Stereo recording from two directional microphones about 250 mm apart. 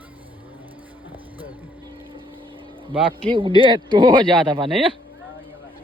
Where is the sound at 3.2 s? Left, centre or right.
Centre.